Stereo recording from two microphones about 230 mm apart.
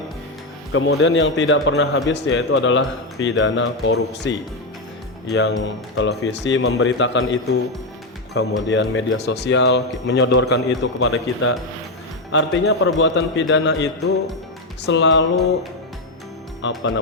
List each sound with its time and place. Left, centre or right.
0.7 s a man's voice: left
11.0 s speech: left
12.3 s speech: left
16.6 s speech: left